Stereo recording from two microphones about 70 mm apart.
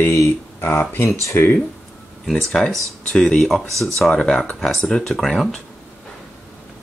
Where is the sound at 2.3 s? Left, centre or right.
Centre.